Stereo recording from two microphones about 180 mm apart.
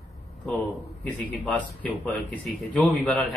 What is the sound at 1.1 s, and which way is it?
Speech, 5° left (ahead or behind).